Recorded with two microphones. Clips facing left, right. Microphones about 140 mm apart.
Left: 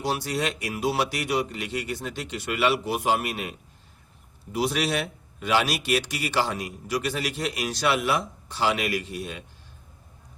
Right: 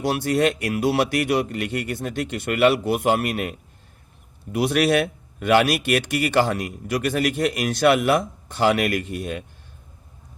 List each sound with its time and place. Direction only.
0.0 s speech: 55° right (ahead or behind)
4.5 s speech: 60° right (ahead or behind)